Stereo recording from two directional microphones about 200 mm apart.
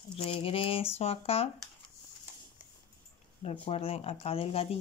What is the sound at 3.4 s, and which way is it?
Speech, 30° left (ahead or behind).